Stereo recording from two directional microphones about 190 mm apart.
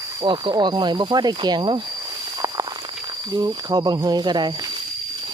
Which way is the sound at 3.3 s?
20° right (ahead or behind).